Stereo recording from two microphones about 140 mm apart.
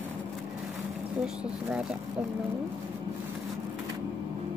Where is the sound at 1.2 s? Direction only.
5° right (ahead or behind).